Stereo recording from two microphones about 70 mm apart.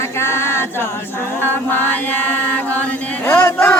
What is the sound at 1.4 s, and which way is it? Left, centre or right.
Chant, left.